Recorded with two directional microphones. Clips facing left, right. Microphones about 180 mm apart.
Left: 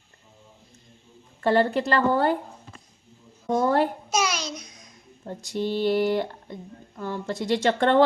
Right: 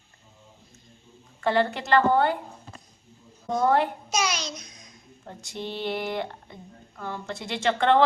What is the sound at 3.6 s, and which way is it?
Speech, 40° left (ahead or behind).